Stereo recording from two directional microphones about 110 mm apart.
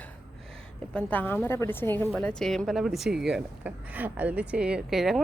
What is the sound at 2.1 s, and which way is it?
Speech, 5° left (ahead or behind).